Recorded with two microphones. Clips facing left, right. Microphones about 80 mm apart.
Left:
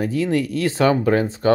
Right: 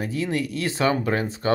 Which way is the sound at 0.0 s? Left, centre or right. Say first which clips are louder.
Left 5 dB; left.